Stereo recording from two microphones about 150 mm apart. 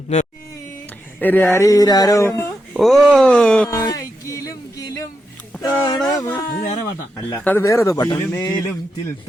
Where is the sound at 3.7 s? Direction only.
20° left (ahead or behind).